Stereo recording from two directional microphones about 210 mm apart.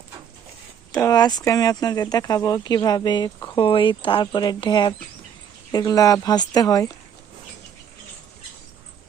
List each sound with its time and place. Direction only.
0.9 s speech: 15° left (ahead or behind)